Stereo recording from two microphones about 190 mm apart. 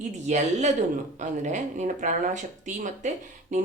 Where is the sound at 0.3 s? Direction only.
35° right (ahead or behind).